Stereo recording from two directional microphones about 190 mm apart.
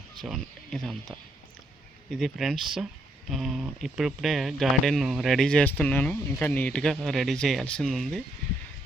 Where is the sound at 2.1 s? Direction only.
Centre (ahead or behind).